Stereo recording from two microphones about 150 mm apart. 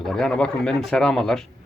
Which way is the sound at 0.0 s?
Centre (ahead or behind).